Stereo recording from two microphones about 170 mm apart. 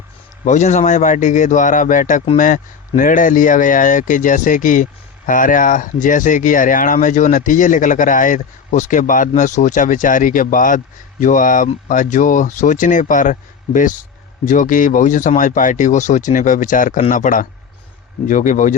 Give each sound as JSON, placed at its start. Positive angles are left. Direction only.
{"t": 0.4, "sound": "speech", "side_deg": 45}